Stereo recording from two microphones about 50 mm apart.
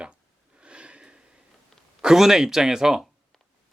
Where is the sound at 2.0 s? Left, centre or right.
Centre.